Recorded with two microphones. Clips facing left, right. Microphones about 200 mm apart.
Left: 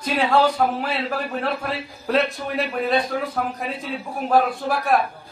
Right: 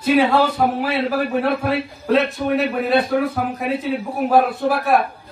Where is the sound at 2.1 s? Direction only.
Centre (ahead or behind).